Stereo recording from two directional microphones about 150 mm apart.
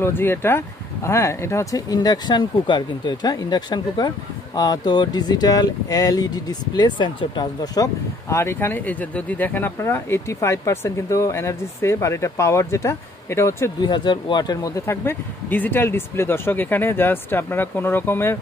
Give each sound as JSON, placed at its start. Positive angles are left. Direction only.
{"t": 0.0, "sound": "speech", "side_deg": 15}
{"t": 13.7, "sound": "speech", "side_deg": 30}